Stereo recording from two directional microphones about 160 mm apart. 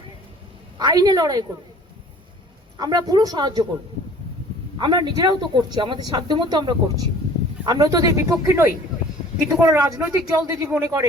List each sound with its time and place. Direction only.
0.8 s speech: 25° right (ahead or behind)
2.7 s speech: 25° right (ahead or behind)
4.8 s speech: 30° right (ahead or behind)